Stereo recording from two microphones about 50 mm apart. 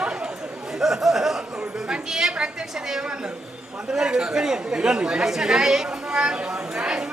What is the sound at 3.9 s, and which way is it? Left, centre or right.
Speech, centre.